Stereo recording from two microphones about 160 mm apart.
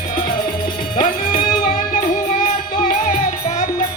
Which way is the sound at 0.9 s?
55° left (ahead or behind).